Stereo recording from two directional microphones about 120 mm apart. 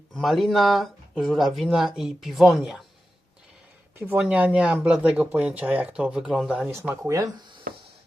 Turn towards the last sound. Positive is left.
turn(degrees=-35)  # may be behind; listen again after turning